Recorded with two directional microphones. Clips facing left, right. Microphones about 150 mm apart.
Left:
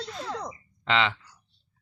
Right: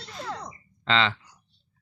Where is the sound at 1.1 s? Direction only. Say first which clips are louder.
Right 1 dB; 15° right (ahead or behind).